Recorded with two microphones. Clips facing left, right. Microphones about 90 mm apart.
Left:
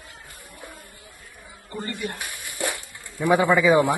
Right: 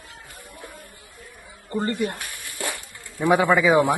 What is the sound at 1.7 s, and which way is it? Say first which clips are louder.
Speech: right 7 dB; 35° right (ahead or behind).